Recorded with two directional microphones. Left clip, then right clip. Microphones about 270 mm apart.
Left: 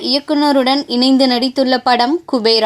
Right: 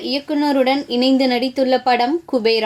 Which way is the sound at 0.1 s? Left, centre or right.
Centre.